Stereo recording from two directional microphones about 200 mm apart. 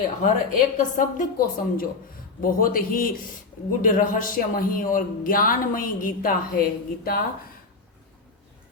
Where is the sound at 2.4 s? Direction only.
45° left (ahead or behind).